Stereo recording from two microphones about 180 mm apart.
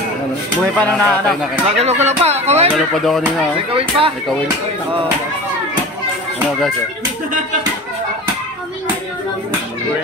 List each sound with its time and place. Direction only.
0.7 s speech: 5° left (ahead or behind)
1.8 s speech: 35° right (ahead or behind)
2.7 s speech: centre (ahead or behind)
3.7 s speech: 30° right (ahead or behind)